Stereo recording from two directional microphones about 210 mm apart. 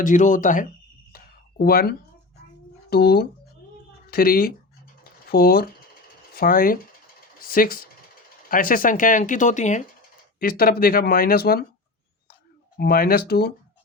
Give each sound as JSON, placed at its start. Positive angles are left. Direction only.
{"t": 0.0, "sound": "speech", "side_deg": 35}
{"t": 1.1, "sound": "a sound", "side_deg": 45}
{"t": 2.9, "sound": "speech", "side_deg": 45}
{"t": 12.7, "sound": "speech", "side_deg": 45}